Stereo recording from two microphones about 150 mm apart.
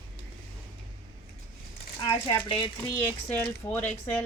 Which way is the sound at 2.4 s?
35° left (ahead or behind).